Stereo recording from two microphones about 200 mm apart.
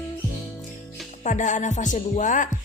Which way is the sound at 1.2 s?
40° left (ahead or behind).